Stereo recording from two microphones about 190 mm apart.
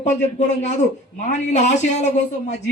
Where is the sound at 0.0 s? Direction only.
40° left (ahead or behind).